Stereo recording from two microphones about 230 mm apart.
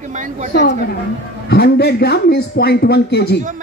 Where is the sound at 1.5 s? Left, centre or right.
Left.